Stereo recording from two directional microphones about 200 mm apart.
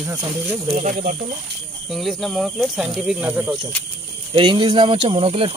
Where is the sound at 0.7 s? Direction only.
40° right (ahead or behind).